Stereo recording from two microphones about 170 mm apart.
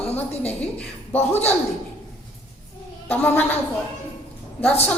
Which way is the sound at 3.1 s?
10° left (ahead or behind).